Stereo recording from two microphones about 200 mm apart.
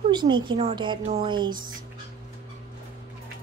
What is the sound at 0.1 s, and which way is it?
A woman's voice, 20° right (ahead or behind).